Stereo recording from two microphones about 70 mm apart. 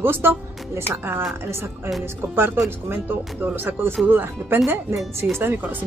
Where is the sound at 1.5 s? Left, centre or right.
Right.